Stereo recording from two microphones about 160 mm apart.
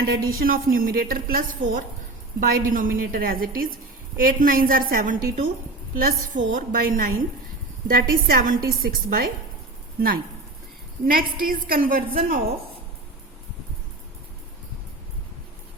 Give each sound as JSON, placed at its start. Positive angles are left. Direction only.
{"t": 0.0, "sound": "a woman's voice", "side_deg": -70}
{"t": 11.0, "sound": "a woman's voice", "side_deg": -65}